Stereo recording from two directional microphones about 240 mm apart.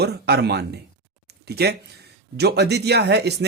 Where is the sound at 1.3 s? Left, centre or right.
Right.